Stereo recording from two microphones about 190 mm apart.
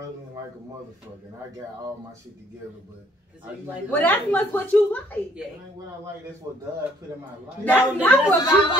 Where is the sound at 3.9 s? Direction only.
10° left (ahead or behind).